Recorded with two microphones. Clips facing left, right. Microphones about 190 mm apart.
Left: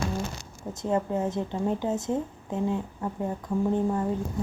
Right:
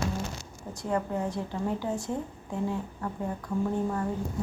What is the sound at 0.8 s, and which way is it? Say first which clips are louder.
A woman's voice: left 3 dB; 20° left (ahead or behind).